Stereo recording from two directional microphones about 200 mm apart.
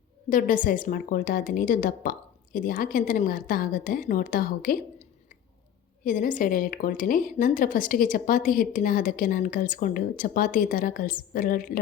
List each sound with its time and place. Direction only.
0.3 s a woman's voice: 40° left (ahead or behind)
6.1 s a woman's voice: 40° left (ahead or behind)